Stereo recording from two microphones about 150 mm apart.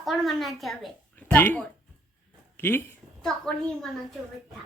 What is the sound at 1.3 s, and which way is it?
A woman's voice, 15° left (ahead or behind).